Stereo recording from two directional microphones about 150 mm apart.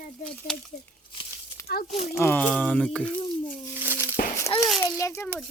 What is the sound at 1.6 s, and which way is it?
Speech, 90° left.